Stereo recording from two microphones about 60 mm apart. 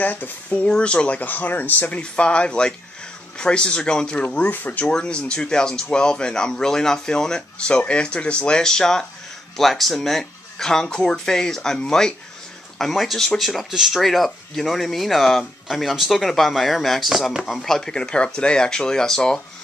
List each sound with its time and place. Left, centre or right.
0.0 s speech: left
0.6 s speech: centre
2.0 s speech: centre
4.5 s speech: left
4.8 s speech: centre